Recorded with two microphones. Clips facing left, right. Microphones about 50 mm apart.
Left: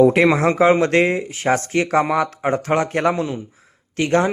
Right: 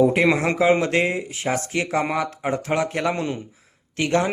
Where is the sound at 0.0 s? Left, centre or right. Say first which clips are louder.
Left 4 dB; left.